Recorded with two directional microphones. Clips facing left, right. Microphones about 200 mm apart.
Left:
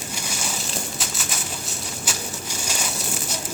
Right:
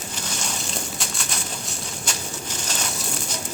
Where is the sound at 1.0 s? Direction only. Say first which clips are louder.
Even; 5° left (ahead or behind).